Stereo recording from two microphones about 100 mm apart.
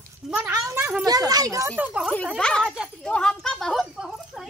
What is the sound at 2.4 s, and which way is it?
A child's voice, 10° left (ahead or behind).